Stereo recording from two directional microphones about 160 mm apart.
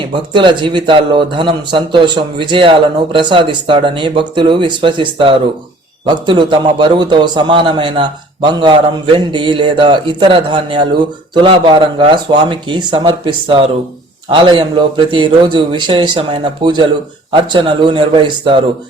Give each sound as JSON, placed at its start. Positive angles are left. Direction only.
{"t": 0.0, "sound": "a man's voice", "side_deg": -30}